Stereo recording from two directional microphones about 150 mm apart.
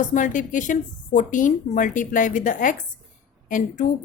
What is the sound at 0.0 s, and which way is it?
Speech, 60° left (ahead or behind).